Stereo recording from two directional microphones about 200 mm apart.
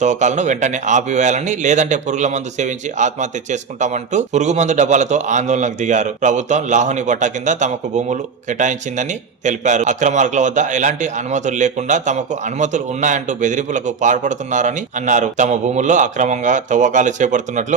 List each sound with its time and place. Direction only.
0.0 s speech: 35° right (ahead or behind)